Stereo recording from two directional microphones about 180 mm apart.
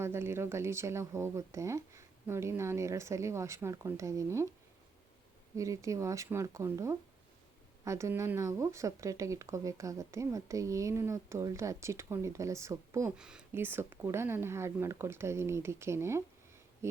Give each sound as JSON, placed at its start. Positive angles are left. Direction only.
{"t": 0.0, "sound": "speech", "side_deg": -15}
{"t": 5.5, "sound": "speech", "side_deg": -15}
{"t": 13.1, "sound": "speech", "side_deg": -5}